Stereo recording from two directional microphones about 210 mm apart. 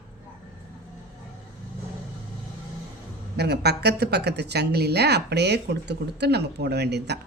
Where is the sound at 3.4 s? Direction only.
50° right (ahead or behind).